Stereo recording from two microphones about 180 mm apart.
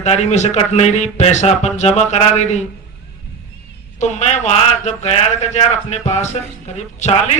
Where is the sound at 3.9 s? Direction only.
40° left (ahead or behind).